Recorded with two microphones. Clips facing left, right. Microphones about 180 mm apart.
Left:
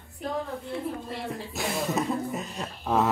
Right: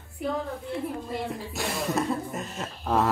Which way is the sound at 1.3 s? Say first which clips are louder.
Even; centre (ahead or behind).